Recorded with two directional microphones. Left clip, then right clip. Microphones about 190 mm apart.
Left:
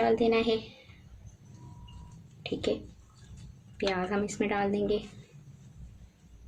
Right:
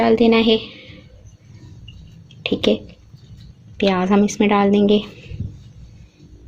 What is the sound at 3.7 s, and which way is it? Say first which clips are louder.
A woman's voice: right 13 dB; 35° right (ahead or behind).